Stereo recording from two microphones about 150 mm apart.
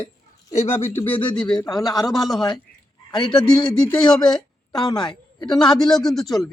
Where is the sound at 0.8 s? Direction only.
15° left (ahead or behind).